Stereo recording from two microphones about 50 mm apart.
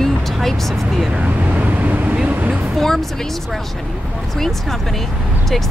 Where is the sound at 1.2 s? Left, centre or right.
Right.